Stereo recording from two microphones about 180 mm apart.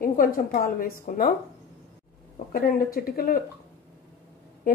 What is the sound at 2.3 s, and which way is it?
Speech, 50° left (ahead or behind).